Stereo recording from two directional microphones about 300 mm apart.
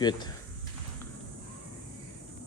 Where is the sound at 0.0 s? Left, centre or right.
Centre.